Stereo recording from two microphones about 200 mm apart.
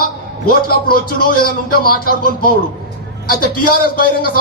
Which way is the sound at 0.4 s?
50° left (ahead or behind).